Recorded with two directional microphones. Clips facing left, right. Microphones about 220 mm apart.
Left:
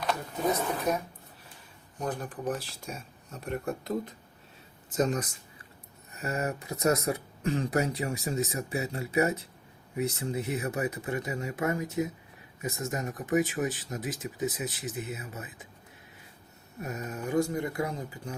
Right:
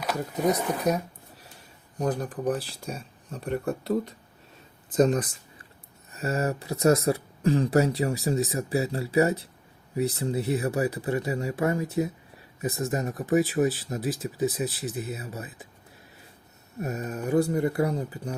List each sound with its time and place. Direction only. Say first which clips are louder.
0.0 s speech: right 4 dB; 10° right (ahead or behind)
2.0 s speech: right 6 dB; 35° right (ahead or behind)
16.8 s speech: right 4 dB; 35° right (ahead or behind)